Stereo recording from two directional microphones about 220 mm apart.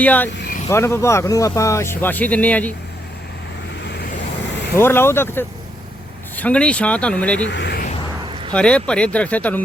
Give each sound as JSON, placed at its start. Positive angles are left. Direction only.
{"t": 0.0, "sound": "speech", "side_deg": 5}
{"t": 4.7, "sound": "speech", "side_deg": 10}
{"t": 7.4, "sound": "speech", "side_deg": 55}
{"t": 8.5, "sound": "speech", "side_deg": 5}